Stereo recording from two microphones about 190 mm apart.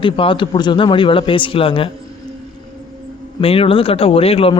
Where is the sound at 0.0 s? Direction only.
25° left (ahead or behind).